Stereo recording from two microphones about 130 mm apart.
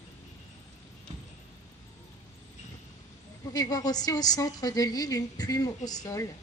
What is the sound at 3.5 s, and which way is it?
A woman's voice, 30° left (ahead or behind).